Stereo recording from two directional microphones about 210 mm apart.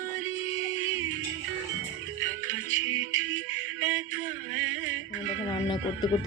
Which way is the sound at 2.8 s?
80° right.